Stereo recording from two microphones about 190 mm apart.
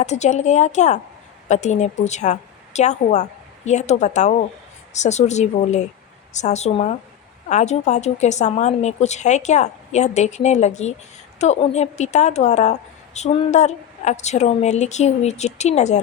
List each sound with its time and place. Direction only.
0.0 s a woman's voice: 35° left (ahead or behind)